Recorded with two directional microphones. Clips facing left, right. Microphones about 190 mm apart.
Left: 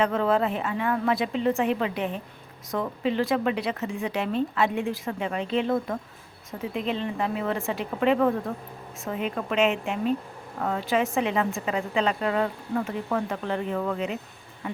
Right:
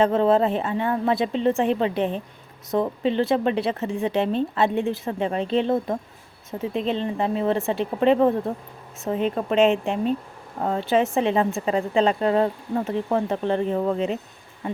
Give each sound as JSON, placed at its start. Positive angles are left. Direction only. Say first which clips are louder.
{"t": 0.0, "sound": "a woman's voice", "louder": "right 5 dB", "side_deg": -25}